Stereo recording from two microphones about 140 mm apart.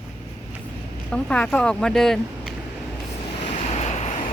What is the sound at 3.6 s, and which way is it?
Vehicle, 55° left (ahead or behind).